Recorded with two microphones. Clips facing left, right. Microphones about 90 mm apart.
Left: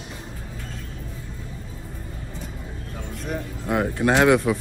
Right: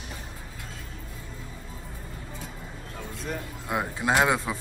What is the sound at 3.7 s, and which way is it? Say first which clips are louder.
Speech: left 5 dB; 20° right (ahead or behind).